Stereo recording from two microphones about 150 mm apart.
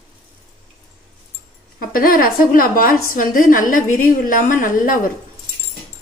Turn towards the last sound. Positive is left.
turn(degrees=65)  # may be behind; listen again after turning